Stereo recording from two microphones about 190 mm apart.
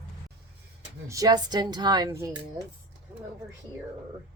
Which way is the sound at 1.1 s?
20° right (ahead or behind).